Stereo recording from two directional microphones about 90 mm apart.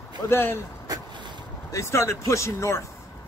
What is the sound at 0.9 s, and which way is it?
Boat, 45° right (ahead or behind).